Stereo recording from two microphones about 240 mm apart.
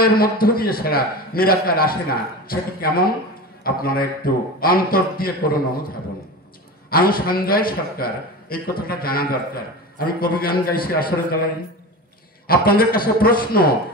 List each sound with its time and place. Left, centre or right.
0.0 s a man's voice: left
12.4 s a man's voice: left